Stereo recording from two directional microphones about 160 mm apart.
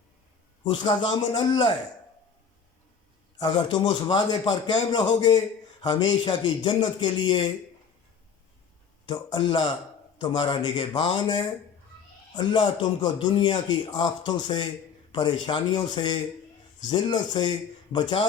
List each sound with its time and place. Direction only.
0.6 s a man's voice: 30° left (ahead or behind)
3.3 s a man's voice: 25° left (ahead or behind)
9.0 s a man's voice: 25° left (ahead or behind)